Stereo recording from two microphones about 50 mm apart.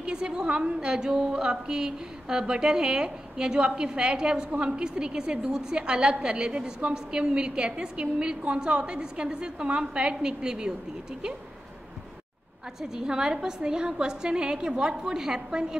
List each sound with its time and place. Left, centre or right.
0.0 s a woman's voice: centre
12.8 s a woman's voice: centre